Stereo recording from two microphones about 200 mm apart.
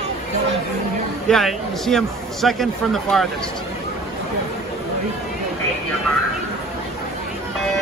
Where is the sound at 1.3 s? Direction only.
Centre (ahead or behind).